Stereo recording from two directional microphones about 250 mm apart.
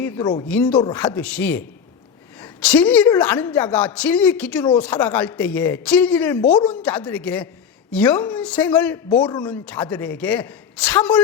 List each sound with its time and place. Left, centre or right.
0.0 s a woman's voice: centre
9.0 s speech: centre
9.5 s a woman's voice: centre